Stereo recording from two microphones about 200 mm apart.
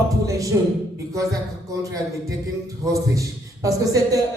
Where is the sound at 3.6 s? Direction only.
15° right (ahead or behind).